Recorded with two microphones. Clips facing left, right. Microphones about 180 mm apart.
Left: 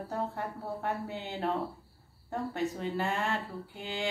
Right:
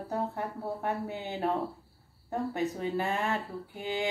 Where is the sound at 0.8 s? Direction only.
15° right (ahead or behind).